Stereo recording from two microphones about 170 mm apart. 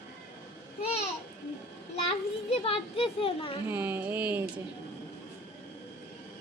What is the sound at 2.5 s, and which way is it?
A child's voice, 35° left (ahead or behind).